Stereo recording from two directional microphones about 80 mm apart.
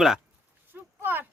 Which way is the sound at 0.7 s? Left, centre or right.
Right.